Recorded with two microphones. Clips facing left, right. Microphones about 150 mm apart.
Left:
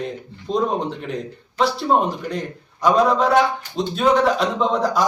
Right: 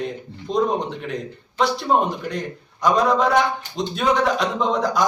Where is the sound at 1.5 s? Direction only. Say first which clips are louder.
Left 1 dB; centre (ahead or behind).